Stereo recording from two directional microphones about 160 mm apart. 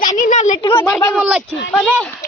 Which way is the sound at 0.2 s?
50° left (ahead or behind).